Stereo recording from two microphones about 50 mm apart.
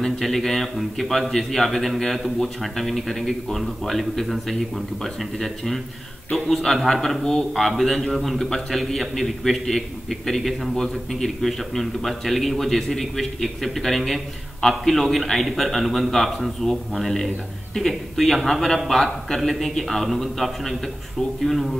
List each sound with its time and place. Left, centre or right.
0.0 s a man's voice: centre